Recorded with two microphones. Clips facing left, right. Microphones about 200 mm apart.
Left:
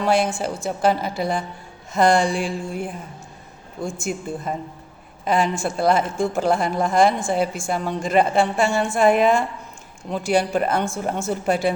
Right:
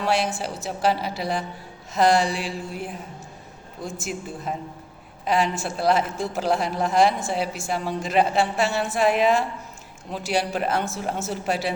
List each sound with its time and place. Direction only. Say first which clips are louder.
0.0 s a woman's voice: left 4 dB; centre (ahead or behind)
2.3 s a sound: left 5 dB; 50° left (ahead or behind)
3.8 s a woman's voice: left 4 dB; centre (ahead or behind)